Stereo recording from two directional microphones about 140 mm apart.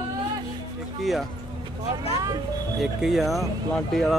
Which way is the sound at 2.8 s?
Centre (ahead or behind).